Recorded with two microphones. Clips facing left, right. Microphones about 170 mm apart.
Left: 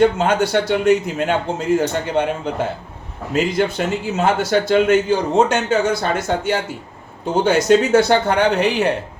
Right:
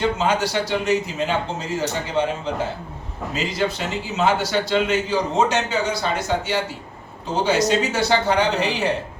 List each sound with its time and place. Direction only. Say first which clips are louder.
0.2 s speech: left 4 dB; 55° left (ahead or behind)
3.3 s a man's voice: left 6 dB; 50° left (ahead or behind)